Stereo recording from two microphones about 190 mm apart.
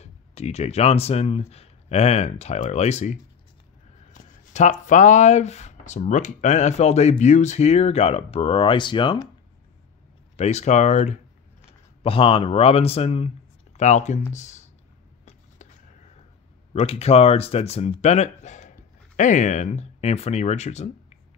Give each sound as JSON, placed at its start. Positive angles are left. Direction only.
{"t": 0.0, "sound": "speech", "side_deg": 35}
{"t": 10.3, "sound": "speech", "side_deg": 35}
{"t": 16.7, "sound": "speech", "side_deg": 35}